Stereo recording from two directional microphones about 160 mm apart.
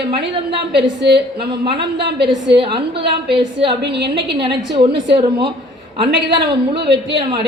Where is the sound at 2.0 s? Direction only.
90° right.